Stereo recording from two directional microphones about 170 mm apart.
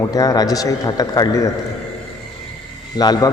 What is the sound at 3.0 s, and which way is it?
Speech, 25° left (ahead or behind).